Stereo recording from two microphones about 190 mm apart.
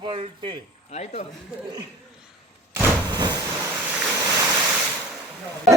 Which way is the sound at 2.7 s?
20° right (ahead or behind).